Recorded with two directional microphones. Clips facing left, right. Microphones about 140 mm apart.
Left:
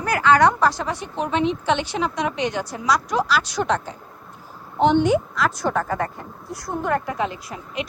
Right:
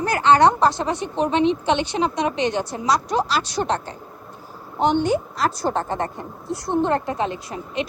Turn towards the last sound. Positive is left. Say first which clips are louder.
# right 3 dB
turn(degrees=-25)  # may be behind; listen again after turning